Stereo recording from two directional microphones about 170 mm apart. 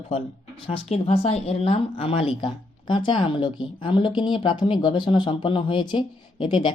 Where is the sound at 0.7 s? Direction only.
35° left (ahead or behind).